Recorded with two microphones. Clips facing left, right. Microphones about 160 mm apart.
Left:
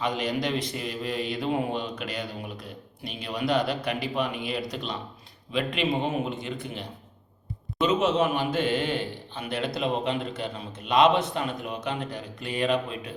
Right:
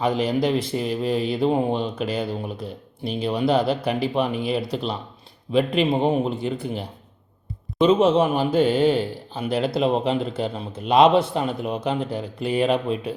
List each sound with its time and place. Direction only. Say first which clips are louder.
0.0 s speech: right 7 dB; 30° right (ahead or behind)